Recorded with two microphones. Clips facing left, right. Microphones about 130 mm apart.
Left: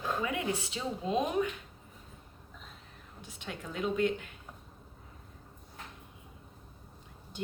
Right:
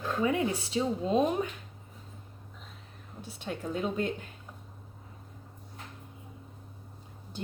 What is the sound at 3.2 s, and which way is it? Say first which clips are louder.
Speech: right 6 dB; 35° right (ahead or behind).